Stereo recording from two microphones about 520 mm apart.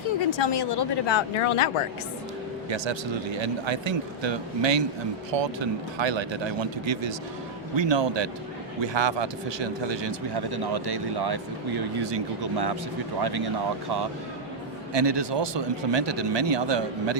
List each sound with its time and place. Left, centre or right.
0.3 s speech: left
2.6 s speech: right
14.9 s speech: right